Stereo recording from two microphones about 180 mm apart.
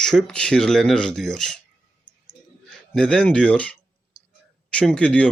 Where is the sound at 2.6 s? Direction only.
5° left (ahead or behind).